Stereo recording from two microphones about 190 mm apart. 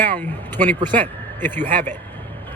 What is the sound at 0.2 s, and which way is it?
Speech, 10° left (ahead or behind).